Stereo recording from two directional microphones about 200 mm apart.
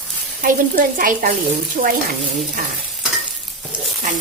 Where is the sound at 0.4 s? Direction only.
40° right (ahead or behind).